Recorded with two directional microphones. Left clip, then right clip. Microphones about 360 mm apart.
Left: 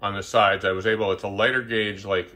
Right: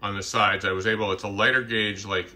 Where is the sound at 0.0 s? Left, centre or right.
Centre.